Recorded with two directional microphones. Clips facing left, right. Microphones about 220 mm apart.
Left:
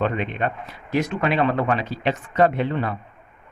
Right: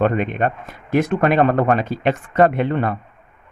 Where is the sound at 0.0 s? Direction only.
50° right (ahead or behind).